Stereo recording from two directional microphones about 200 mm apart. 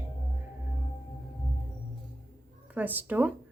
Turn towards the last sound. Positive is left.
turn(degrees=-10)  # may be behind; listen again after turning